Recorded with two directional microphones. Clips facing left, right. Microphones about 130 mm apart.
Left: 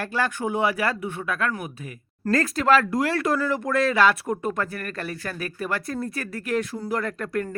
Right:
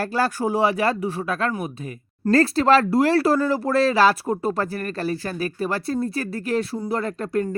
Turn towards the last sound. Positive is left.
turn(degrees=-25)  # may be behind; listen again after turning